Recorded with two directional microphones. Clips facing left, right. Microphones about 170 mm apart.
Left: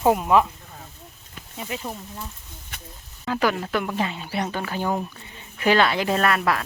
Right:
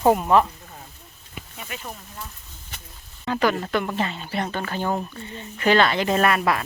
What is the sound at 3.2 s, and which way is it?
Speech, 5° left (ahead or behind).